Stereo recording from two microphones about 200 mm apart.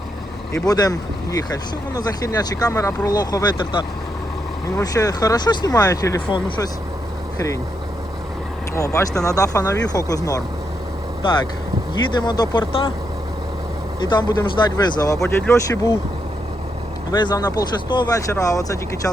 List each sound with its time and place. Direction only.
0.5 s speech: 20° left (ahead or behind)
8.7 s speech: 15° left (ahead or behind)
14.0 s speech: 20° left (ahead or behind)
17.1 s speech: 20° left (ahead or behind)